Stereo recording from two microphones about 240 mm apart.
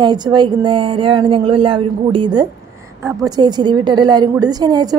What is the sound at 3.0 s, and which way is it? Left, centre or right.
A woman's voice, centre.